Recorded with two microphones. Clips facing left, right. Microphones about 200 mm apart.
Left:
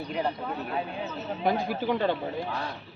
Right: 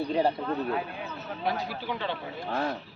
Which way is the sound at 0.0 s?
30° right (ahead or behind).